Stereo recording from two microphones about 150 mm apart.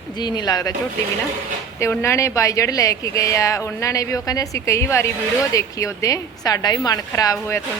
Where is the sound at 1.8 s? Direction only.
20° left (ahead or behind).